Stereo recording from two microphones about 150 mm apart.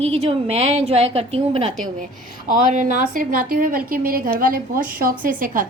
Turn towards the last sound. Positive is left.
turn(degrees=-65)  # may be behind; listen again after turning